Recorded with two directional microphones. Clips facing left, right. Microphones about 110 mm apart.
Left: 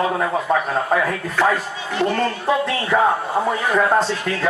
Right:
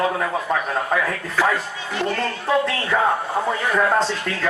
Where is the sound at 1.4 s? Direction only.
5° right (ahead or behind).